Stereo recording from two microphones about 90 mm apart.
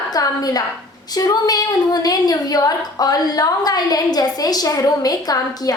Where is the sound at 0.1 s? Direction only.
45° left (ahead or behind).